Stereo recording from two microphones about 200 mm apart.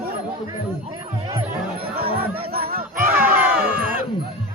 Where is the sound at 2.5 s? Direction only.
50° right (ahead or behind).